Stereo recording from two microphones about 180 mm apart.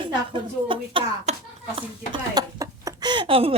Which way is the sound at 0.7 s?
35° right (ahead or behind).